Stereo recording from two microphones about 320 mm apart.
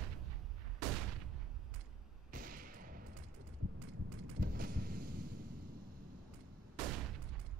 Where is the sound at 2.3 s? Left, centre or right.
Right.